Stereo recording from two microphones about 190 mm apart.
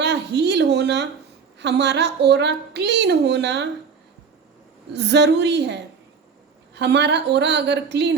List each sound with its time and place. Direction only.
0.0 s a woman's voice: 65° right (ahead or behind)
4.9 s a woman's voice: 65° right (ahead or behind)